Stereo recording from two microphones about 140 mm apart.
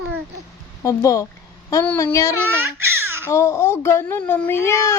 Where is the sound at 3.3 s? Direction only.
20° left (ahead or behind).